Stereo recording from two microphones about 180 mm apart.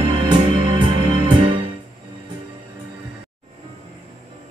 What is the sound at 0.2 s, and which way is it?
Music, 25° right (ahead or behind).